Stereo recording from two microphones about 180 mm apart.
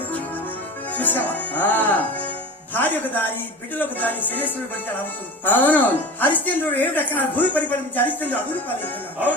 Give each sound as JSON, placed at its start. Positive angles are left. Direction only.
{"t": 0.9, "sound": "speech", "side_deg": 10}